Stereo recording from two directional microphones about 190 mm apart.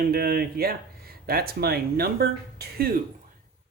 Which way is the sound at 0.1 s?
50° right (ahead or behind).